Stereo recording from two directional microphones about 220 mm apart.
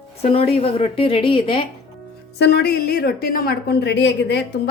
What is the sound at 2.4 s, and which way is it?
A woman's voice, 45° left (ahead or behind).